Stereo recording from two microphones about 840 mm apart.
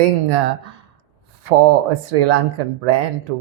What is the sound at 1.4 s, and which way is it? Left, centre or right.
Speech, right.